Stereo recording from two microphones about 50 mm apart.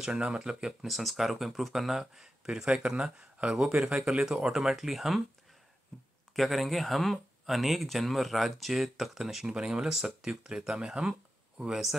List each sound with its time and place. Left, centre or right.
0.1 s speech: right
0.4 s speech: centre
6.3 s speech: centre